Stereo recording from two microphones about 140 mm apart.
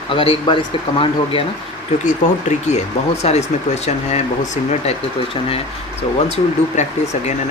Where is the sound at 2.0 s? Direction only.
55° left (ahead or behind).